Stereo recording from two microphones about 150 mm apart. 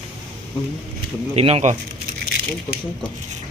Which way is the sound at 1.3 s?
45° right (ahead or behind).